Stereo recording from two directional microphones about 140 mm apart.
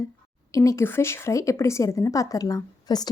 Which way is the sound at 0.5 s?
20° left (ahead or behind).